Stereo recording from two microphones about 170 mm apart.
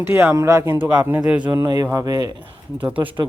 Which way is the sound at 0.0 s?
10° right (ahead or behind).